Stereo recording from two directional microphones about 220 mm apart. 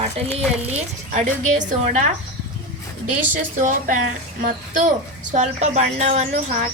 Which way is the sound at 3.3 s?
35° right (ahead or behind).